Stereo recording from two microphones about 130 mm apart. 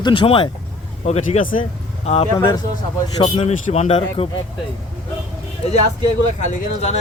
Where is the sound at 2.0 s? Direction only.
50° left (ahead or behind).